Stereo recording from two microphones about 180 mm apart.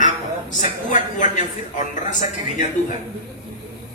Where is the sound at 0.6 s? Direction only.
45° left (ahead or behind).